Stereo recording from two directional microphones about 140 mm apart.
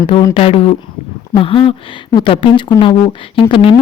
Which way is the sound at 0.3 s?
45° left (ahead or behind).